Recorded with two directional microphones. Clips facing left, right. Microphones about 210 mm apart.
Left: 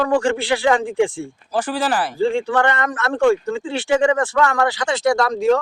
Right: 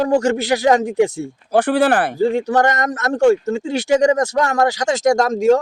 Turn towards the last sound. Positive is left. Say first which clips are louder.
# right 3 dB
turn(degrees=-45)  # may be behind; listen again after turning